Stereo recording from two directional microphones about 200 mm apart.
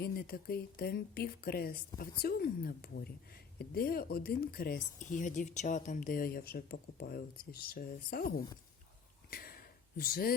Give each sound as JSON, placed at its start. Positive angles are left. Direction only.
{"t": 0.0, "sound": "speech", "side_deg": 50}
{"t": 9.3, "sound": "a sound", "side_deg": 50}
{"t": 10.0, "sound": "speech", "side_deg": 50}